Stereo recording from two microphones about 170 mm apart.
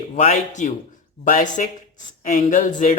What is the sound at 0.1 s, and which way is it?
Speech, 45° left (ahead or behind).